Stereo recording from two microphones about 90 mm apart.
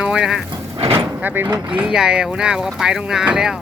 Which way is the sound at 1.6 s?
10° right (ahead or behind).